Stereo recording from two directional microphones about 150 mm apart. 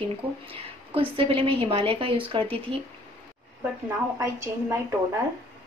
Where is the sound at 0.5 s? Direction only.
40° right (ahead or behind).